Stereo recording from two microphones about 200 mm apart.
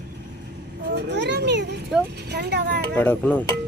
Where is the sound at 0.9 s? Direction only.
60° right (ahead or behind).